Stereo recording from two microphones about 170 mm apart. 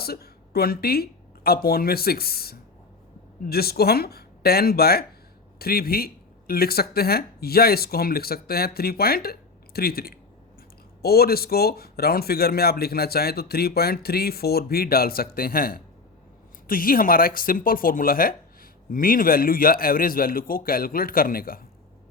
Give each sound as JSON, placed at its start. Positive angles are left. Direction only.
{"t": 0.0, "sound": "a woman's voice", "side_deg": 65}